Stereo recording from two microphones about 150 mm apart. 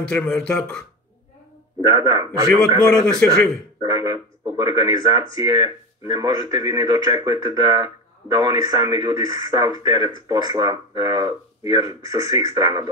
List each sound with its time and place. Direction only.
0.0 s speech: 5° left (ahead or behind)
1.8 s speech: 25° right (ahead or behind)
3.8 s speech: 25° right (ahead or behind)